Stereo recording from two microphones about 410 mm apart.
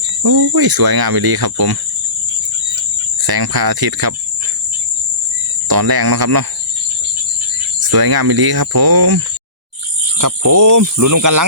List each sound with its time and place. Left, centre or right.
0.2 s cricket: right
3.2 s cricket: right
5.6 s cricket: right
7.9 s cricket: right
10.2 s speech: right